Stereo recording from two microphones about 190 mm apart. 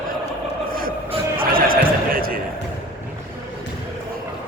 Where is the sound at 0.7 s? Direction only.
50° right (ahead or behind).